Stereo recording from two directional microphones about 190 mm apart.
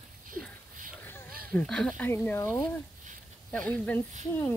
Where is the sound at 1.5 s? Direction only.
5° left (ahead or behind).